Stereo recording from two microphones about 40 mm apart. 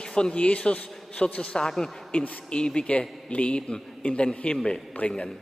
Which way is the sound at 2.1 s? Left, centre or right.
Left.